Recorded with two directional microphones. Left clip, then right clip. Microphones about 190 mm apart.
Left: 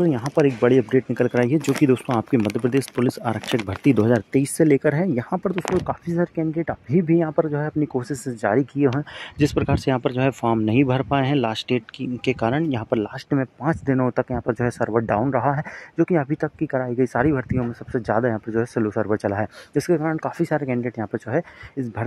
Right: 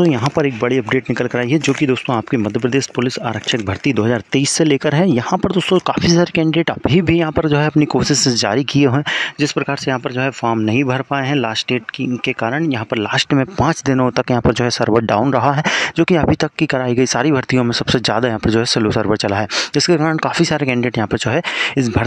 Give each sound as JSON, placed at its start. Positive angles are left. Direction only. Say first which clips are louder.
{"t": 0.0, "sound": "speech", "louder": "right 4 dB", "side_deg": -25}
{"t": 4.3, "sound": "speech", "louder": "right 3 dB", "side_deg": -35}
{"t": 8.5, "sound": "speech", "louder": "right 4 dB", "side_deg": -40}
{"t": 9.4, "sound": "speech", "louder": "right 3 dB", "side_deg": 0}
{"t": 13.1, "sound": "speech", "louder": "right 10 dB", "side_deg": -40}